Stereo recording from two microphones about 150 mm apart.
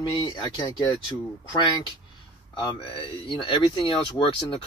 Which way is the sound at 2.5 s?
35° left (ahead or behind).